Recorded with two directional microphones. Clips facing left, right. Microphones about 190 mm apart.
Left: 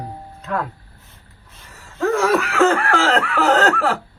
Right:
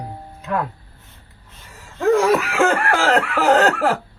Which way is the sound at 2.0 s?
15° right (ahead or behind).